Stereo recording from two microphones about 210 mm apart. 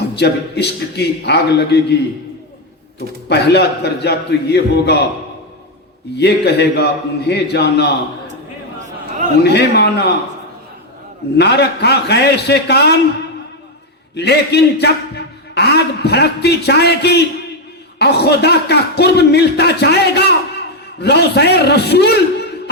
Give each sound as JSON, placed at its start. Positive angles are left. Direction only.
{"t": 0.2, "sound": "a man's voice", "side_deg": 50}
{"t": 3.2, "sound": "a man's voice", "side_deg": 50}
{"t": 6.1, "sound": "a man's voice", "side_deg": 50}
{"t": 9.4, "sound": "a man's voice", "side_deg": 50}
{"t": 11.3, "sound": "a man's voice", "side_deg": 50}
{"t": 14.2, "sound": "a man's voice", "side_deg": 50}